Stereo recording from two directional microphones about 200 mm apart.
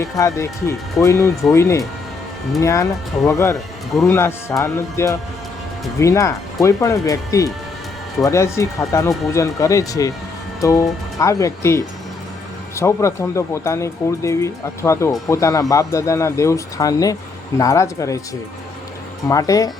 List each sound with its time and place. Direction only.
0.0 s speech: 15° left (ahead or behind)
19.3 s speech: 15° left (ahead or behind)